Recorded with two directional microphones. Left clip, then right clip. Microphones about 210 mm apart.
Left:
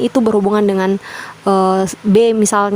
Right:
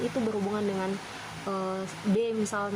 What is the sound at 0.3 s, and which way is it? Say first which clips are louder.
A woman's voice: left 17 dB; 55° left (ahead or behind).